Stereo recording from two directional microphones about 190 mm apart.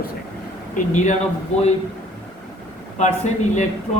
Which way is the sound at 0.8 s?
45° left (ahead or behind).